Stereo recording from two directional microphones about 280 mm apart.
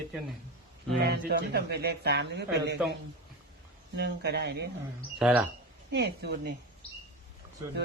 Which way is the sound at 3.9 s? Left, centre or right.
Right.